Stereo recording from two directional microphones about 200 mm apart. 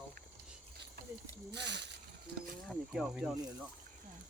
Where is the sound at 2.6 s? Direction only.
Centre (ahead or behind).